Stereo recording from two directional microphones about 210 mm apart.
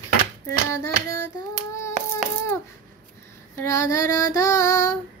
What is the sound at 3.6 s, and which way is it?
Child singing, 15° left (ahead or behind).